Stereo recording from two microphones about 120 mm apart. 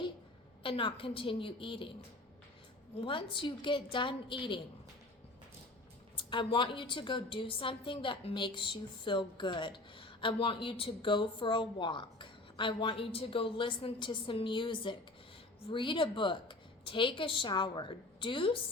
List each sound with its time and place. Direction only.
0.6 s a woman's voice: 45° left (ahead or behind)
3.0 s a woman's voice: 45° left (ahead or behind)
6.1 s a woman's voice: 45° left (ahead or behind)